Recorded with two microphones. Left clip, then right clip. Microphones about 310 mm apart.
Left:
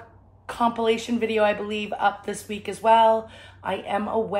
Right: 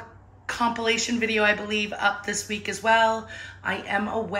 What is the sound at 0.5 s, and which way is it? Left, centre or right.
A woman's voice, centre.